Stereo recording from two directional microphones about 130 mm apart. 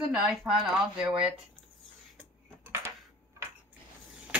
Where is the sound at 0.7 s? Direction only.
5° right (ahead or behind).